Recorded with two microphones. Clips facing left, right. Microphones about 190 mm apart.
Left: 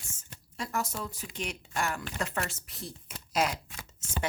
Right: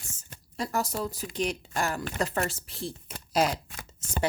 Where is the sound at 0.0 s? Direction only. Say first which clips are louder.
Right 2 dB; 35° right (ahead or behind).